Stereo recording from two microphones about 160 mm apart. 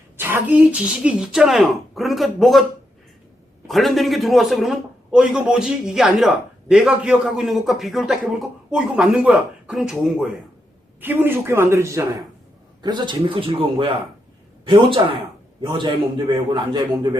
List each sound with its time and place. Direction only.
0.2 s a man's voice: 10° right (ahead or behind)
3.7 s a man's voice: centre (ahead or behind)
11.0 s a man's voice: 15° right (ahead or behind)